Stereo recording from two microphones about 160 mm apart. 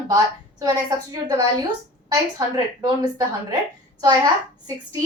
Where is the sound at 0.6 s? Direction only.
25° right (ahead or behind).